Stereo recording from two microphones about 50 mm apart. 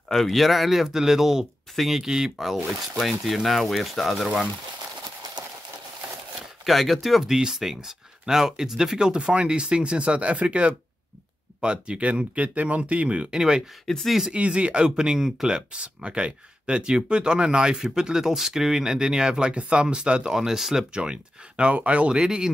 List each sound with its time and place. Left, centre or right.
0.1 s speech: centre
6.6 s speech: centre; by 13.4 s right
13.4 s speech: centre
13.8 s speech: centre
14.3 s speech: right
14.9 s speech: centre
20.9 s speech: right